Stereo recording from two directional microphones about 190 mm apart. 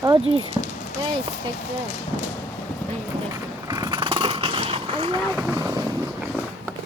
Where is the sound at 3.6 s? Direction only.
20° right (ahead or behind).